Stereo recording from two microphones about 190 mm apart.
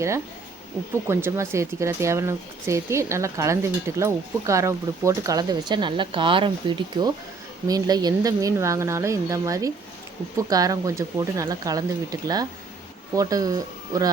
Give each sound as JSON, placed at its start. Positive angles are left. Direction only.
{"t": 1.0, "sound": "speech", "side_deg": -15}